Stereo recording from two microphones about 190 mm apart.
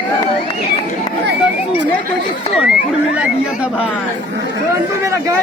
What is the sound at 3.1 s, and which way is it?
Speech, 5° right (ahead or behind).